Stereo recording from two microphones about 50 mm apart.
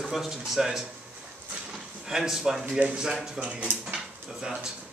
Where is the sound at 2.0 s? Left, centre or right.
Centre.